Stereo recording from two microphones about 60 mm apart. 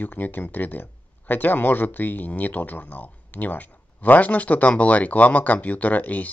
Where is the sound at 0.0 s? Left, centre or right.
Left.